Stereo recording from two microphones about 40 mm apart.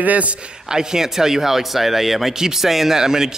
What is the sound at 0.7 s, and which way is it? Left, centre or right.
A man's voice, centre.